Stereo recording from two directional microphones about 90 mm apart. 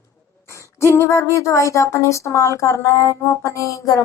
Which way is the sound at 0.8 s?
30° left (ahead or behind).